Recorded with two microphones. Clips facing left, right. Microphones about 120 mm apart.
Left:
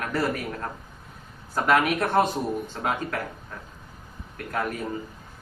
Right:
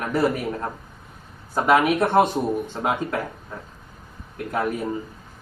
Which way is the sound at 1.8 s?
20° right (ahead or behind).